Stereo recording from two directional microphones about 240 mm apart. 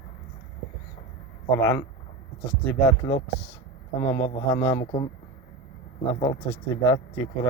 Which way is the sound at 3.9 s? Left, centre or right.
Centre.